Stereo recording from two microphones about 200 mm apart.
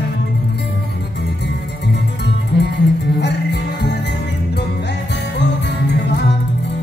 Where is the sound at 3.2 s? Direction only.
55° left (ahead or behind).